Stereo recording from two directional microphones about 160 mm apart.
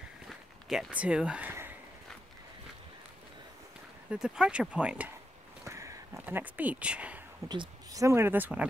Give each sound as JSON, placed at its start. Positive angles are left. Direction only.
{"t": 0.3, "sound": "walk", "side_deg": -5}
{"t": 4.1, "sound": "speech", "side_deg": -5}
{"t": 5.6, "sound": "a sound", "side_deg": -20}
{"t": 7.4, "sound": "speech", "side_deg": -30}